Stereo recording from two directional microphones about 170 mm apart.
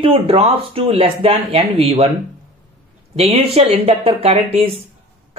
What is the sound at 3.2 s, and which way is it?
Speech, 35° right (ahead or behind).